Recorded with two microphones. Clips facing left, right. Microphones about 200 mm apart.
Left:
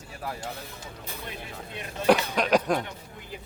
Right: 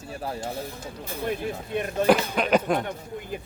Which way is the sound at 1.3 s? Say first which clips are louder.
Right 11 dB; 50° right (ahead or behind).